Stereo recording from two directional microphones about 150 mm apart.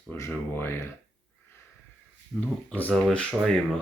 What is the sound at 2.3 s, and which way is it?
Speech, centre (ahead or behind).